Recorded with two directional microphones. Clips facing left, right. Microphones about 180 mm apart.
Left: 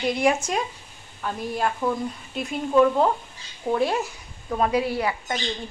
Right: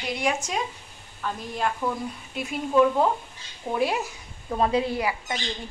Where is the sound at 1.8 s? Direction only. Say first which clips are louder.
Left 5 dB; 20° left (ahead or behind).